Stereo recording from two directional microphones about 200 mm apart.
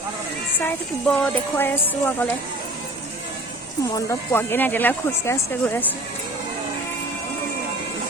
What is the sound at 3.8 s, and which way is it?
Speech, 15° left (ahead or behind).